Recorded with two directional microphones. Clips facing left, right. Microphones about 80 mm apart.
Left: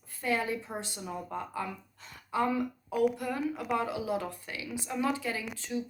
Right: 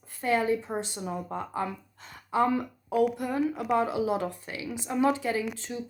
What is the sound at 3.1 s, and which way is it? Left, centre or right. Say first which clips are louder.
A woman's voice: right 4 dB; right.